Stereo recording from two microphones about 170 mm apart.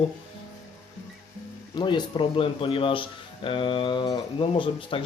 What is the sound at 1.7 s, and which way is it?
Speech, 25° left (ahead or behind).